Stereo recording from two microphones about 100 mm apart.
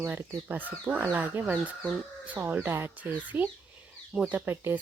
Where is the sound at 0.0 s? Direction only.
20° right (ahead or behind).